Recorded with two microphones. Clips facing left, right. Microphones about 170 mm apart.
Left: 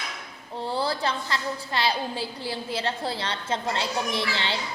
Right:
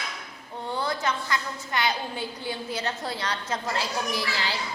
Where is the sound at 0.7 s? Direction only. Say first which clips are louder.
Left 1 dB; 30° left (ahead or behind).